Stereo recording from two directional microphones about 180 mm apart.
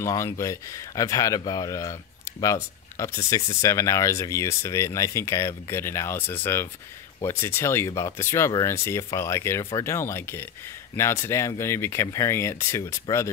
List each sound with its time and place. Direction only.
0.0 s speech: 15° left (ahead or behind)